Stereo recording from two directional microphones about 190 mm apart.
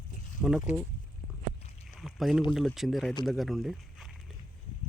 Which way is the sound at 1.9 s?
Centre (ahead or behind).